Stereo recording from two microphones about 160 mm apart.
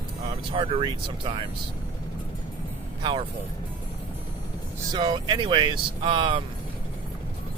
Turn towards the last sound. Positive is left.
turn(degrees=-30)  # may be behind; listen again after turning